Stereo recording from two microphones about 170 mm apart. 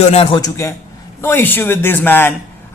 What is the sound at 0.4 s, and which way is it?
A man's voice, 15° left (ahead or behind).